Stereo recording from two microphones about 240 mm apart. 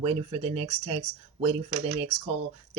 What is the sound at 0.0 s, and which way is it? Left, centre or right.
Speech, right.